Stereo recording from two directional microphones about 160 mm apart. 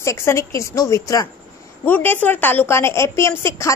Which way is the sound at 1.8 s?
10° left (ahead or behind).